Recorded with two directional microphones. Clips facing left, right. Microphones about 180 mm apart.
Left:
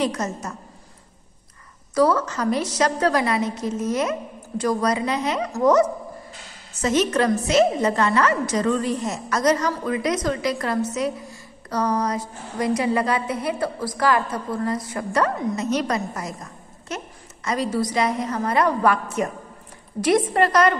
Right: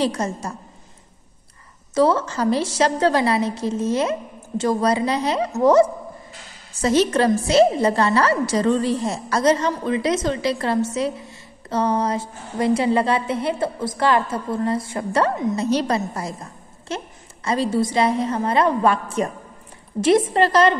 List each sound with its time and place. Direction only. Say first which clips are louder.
0.0 s a woman's voice: right 2 dB; 30° right (ahead or behind)
2.0 s a woman's voice: right 1 dB; 25° right (ahead or behind)